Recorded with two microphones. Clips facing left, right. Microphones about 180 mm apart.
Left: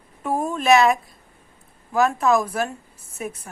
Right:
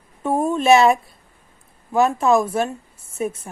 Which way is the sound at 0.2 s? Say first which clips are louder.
Right 4 dB; 25° right (ahead or behind).